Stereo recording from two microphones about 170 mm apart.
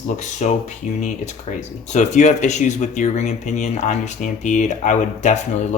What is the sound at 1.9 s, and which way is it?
Speech, 45° left (ahead or behind).